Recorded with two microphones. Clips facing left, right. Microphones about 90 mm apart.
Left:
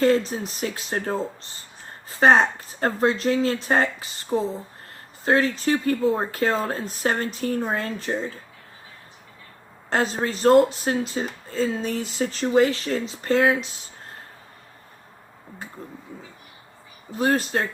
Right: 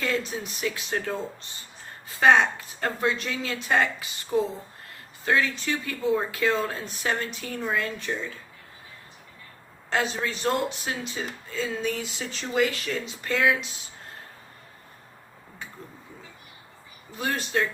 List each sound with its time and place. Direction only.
0.0 s speech: 35° left (ahead or behind)
9.9 s speech: 40° left (ahead or behind)
17.2 s speech: 40° left (ahead or behind)